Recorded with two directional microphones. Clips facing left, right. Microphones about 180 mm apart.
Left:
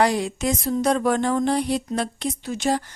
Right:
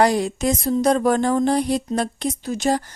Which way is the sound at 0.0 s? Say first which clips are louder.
Right 3 dB; 40° right (ahead or behind).